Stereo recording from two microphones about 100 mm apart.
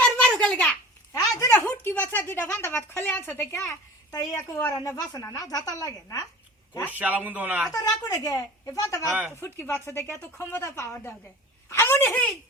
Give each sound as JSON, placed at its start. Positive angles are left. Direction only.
{"t": 0.0, "sound": "a sound", "side_deg": 10}
{"t": 1.1, "sound": "speech", "side_deg": 35}
{"t": 4.4, "sound": "speech", "side_deg": 20}
{"t": 5.2, "sound": "speech", "side_deg": 35}
{"t": 7.0, "sound": "speech", "side_deg": -15}
{"t": 7.7, "sound": "speech", "side_deg": 35}
{"t": 9.0, "sound": "speech", "side_deg": -15}
{"t": 9.4, "sound": "speech", "side_deg": 25}
{"t": 10.6, "sound": "speech", "side_deg": 30}